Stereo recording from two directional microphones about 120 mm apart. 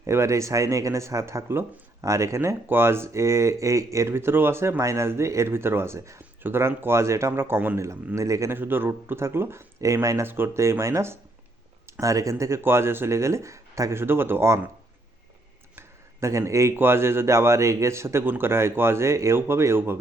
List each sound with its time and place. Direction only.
0.0 s speech: 25° right (ahead or behind)
16.2 s speech: 25° right (ahead or behind)